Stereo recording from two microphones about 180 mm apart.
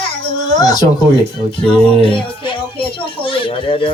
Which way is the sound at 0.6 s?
20° left (ahead or behind).